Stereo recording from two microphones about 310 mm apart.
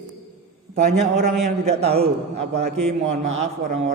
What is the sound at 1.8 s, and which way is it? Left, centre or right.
Mantra, centre.